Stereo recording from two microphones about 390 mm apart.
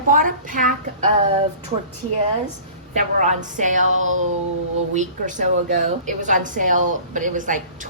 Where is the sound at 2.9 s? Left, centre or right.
Centre.